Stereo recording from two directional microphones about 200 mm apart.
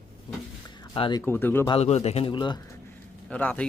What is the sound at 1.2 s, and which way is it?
Speech, 10° left (ahead or behind).